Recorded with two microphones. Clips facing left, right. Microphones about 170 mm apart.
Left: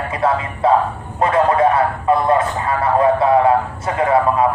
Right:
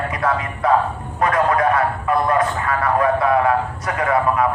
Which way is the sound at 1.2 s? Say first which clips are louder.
Left 3 dB; 25° left (ahead or behind).